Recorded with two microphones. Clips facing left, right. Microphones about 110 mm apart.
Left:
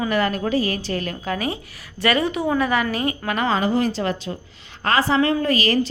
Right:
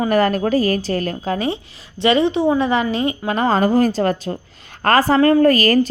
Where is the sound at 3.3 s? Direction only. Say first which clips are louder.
Right 5 dB; 35° right (ahead or behind).